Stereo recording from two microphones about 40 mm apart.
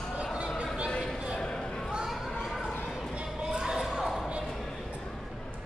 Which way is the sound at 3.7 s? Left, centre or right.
Centre.